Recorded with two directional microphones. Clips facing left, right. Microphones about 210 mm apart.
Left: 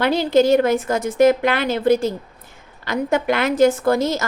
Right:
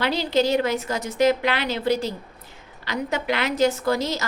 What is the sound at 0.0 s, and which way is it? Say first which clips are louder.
A woman's voice: left 6 dB; 50° left (ahead or behind).